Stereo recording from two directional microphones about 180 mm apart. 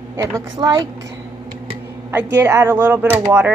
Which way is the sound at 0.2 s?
20° right (ahead or behind).